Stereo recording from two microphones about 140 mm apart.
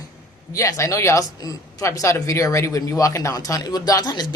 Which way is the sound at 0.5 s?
20° left (ahead or behind).